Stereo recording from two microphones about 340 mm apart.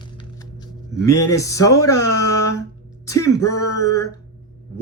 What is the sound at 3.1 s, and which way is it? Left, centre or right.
Speech, centre.